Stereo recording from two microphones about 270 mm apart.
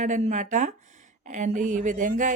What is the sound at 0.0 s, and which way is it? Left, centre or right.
Speech, right.